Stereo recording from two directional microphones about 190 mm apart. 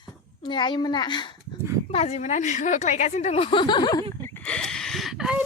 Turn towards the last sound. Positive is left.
turn(degrees=-5)  # may be behind; listen again after turning